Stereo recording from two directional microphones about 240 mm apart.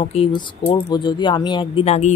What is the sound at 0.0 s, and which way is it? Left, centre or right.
Speech, left.